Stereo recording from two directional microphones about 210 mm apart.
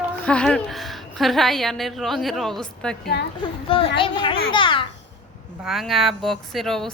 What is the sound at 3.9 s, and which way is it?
Speech, 25° left (ahead or behind).